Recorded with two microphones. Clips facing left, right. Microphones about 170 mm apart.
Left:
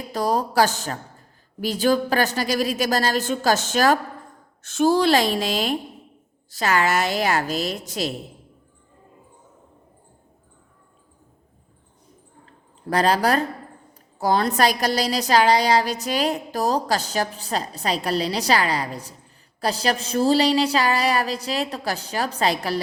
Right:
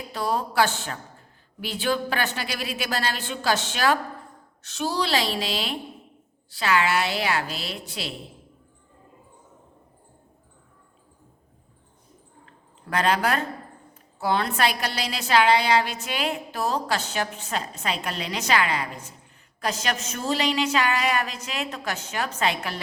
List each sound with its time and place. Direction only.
0.1 s a woman's voice: 40° left (ahead or behind)
12.9 s a woman's voice: 35° left (ahead or behind)